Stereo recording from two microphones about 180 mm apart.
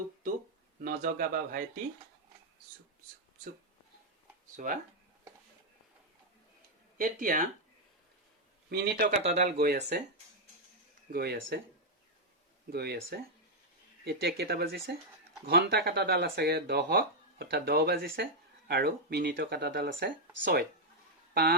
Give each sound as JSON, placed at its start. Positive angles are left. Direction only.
{"t": 0.8, "sound": "speech", "side_deg": -50}
{"t": 4.6, "sound": "speech", "side_deg": -50}
{"t": 7.0, "sound": "speech", "side_deg": -50}
{"t": 8.7, "sound": "speech", "side_deg": -60}
{"t": 9.2, "sound": "speech", "side_deg": -40}
{"t": 9.6, "sound": "speech", "side_deg": -65}
{"t": 11.1, "sound": "speech", "side_deg": -60}
{"t": 12.7, "sound": "speech", "side_deg": -60}